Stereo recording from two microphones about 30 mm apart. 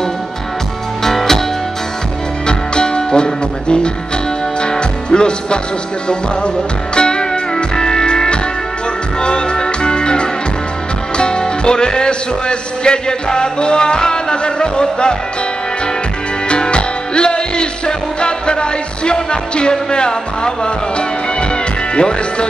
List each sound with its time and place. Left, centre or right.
1.0 s music: centre
2.4 s music: left
7.0 s music: left
11.1 s speech: left
16.4 s music: left
19.9 s speech: left
21.9 s speech: left